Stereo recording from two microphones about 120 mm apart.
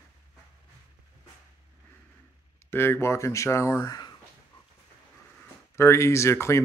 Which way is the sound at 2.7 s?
20° left (ahead or behind).